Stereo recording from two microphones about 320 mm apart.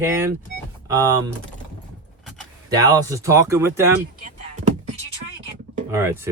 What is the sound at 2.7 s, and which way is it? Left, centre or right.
Speech, centre.